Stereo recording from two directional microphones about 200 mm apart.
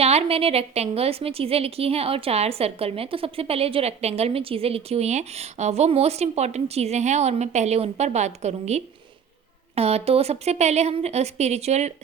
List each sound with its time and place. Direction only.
0.0 s a woman's voice: 30° right (ahead or behind)